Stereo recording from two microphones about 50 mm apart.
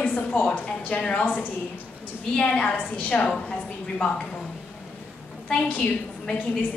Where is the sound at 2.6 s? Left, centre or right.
Left.